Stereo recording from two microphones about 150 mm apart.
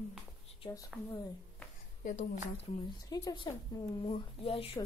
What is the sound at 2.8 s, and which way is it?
Speech, 25° left (ahead or behind).